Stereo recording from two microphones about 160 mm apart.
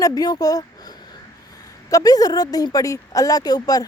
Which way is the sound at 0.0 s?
25° left (ahead or behind).